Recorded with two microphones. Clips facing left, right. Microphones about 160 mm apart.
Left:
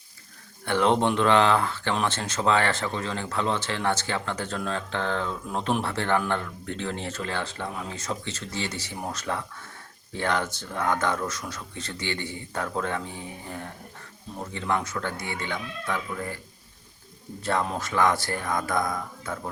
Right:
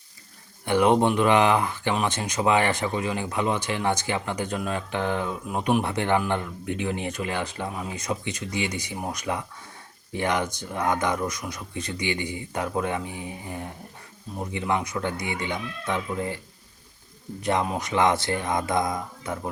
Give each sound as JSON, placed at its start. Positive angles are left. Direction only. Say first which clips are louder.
{"t": 0.6, "sound": "speech", "louder": "right 3 dB", "side_deg": -15}
{"t": 17.4, "sound": "speech", "louder": "right 2 dB", "side_deg": -15}